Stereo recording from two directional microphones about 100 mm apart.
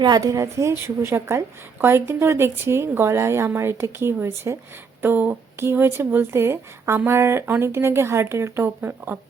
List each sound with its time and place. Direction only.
0.0 s a woman's voice: 40° right (ahead or behind); by 9.1 s 20° right (ahead or behind)